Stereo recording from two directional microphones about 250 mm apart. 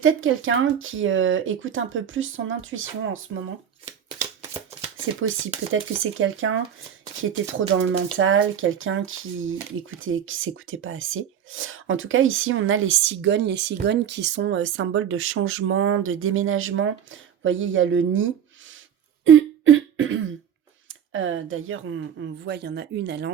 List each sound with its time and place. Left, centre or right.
0.0 s speech: right
5.7 s speech: right
7.8 s speech: right
19.2 s throat clearing: right
20.8 s speech: right